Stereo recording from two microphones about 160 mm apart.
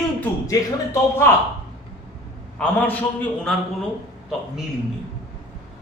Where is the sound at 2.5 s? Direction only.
10° left (ahead or behind).